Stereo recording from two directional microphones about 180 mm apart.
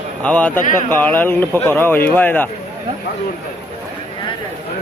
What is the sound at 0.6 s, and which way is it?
Speech, 45° left (ahead or behind).